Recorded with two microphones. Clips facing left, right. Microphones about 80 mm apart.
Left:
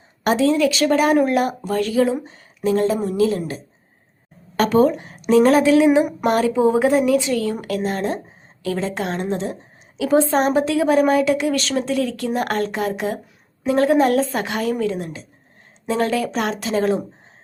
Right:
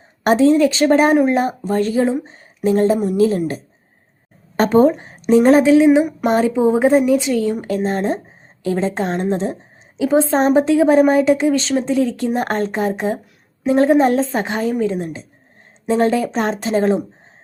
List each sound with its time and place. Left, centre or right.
0.3 s a woman's voice: right; by 7.6 s centre
7.9 s speech: right
10.0 s a woman's voice: right
14.9 s speech: right